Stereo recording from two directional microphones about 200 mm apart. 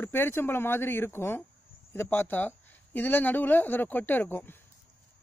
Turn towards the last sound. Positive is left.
turn(degrees=10)  # may be behind; listen again after turning